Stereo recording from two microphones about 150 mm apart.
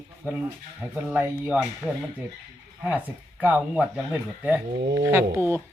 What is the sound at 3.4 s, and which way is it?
Speech, 10° right (ahead or behind).